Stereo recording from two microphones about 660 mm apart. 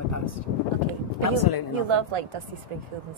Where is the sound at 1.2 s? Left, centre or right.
Left.